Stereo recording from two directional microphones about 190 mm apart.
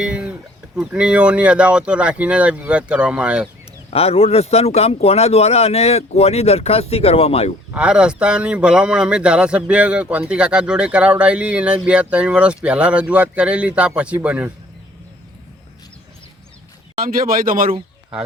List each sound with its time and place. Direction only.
0.0 s chicken: 5° right (ahead or behind)
0.8 s speech: 5° right (ahead or behind)
3.8 s speech: 30° left (ahead or behind)
7.7 s speech: 5° right (ahead or behind)
17.0 s speech: 50° right (ahead or behind)